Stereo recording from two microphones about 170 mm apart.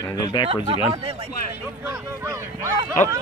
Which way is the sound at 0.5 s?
35° right (ahead or behind).